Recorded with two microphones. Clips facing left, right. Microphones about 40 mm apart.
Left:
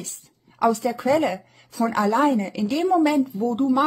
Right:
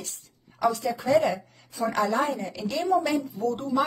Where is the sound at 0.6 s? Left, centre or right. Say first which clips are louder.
Left 5 dB; left.